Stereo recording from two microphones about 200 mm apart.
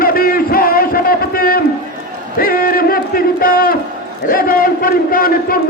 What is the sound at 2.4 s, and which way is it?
Battle cry, 45° left (ahead or behind).